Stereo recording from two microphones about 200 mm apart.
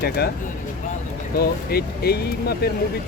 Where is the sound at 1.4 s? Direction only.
50° left (ahead or behind).